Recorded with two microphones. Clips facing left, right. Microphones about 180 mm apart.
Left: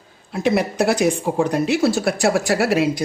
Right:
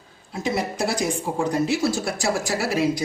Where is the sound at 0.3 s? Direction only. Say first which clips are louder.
Left 6 dB; 65° left (ahead or behind).